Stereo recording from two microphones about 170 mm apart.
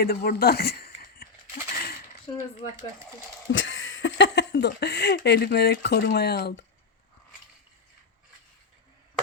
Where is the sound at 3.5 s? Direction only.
90° left; by 6.7 s 75° left (ahead or behind).